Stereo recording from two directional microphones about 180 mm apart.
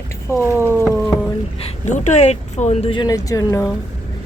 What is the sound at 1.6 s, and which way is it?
Speech, 40° left (ahead or behind).